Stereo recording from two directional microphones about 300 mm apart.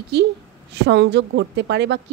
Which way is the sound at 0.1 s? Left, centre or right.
Right.